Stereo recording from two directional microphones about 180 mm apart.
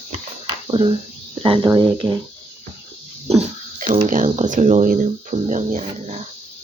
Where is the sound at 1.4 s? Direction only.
30° right (ahead or behind).